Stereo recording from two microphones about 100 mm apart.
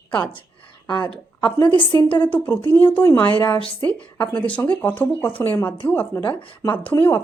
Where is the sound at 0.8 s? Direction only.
50° left (ahead or behind).